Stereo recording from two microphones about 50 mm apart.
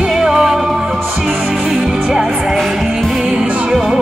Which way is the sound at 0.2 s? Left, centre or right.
Centre.